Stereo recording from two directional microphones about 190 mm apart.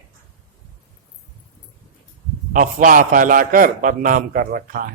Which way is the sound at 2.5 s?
45° right (ahead or behind).